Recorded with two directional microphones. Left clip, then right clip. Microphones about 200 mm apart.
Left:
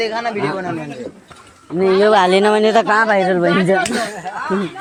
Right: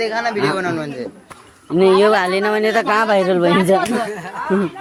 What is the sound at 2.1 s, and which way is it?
Speech, 25° left (ahead or behind).